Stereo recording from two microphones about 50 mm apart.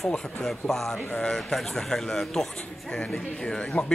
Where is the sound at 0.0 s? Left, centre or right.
Centre.